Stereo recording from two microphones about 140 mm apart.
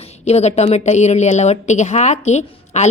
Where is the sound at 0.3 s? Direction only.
50° left (ahead or behind).